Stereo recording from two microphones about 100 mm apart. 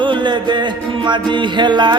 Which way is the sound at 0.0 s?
50° right (ahead or behind).